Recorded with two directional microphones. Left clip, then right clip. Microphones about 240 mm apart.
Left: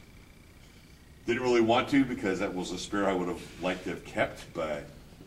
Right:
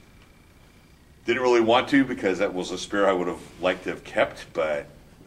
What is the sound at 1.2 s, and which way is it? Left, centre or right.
Speech, right.